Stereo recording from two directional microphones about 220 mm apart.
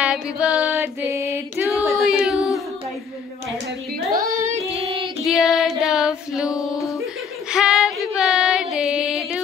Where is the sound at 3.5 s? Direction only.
45° right (ahead or behind).